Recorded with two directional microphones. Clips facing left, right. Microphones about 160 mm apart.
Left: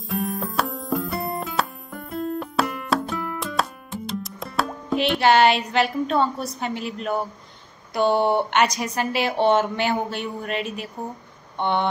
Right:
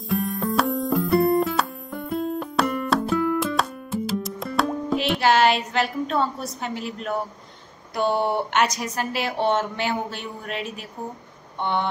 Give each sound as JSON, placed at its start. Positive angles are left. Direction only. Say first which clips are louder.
{"t": 0.1, "sound": "music", "louder": "right 3 dB", "side_deg": 0}
{"t": 7.9, "sound": "a woman's voice", "louder": "left 3 dB", "side_deg": 0}